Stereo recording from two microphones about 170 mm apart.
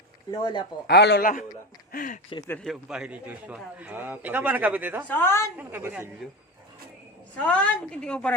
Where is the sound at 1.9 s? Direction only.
55° left (ahead or behind).